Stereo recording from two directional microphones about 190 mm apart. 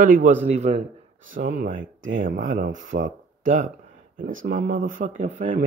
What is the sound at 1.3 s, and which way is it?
Speech, 50° right (ahead or behind).